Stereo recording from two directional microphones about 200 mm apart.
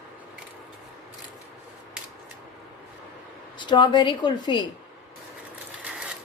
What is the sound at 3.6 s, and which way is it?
A woman's voice, 25° left (ahead or behind).